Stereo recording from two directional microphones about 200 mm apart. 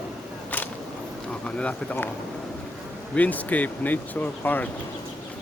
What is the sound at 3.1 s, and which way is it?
Speech, 10° left (ahead or behind).